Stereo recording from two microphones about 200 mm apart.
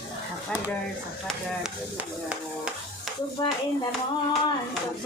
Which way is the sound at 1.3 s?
5° right (ahead or behind).